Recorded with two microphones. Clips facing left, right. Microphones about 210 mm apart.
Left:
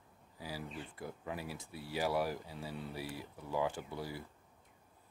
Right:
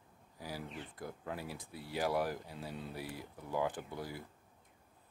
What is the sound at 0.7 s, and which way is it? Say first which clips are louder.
Speech: even; 5° left (ahead or behind).